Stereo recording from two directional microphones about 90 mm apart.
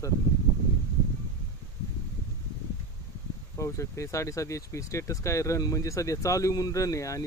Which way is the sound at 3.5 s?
35° left (ahead or behind).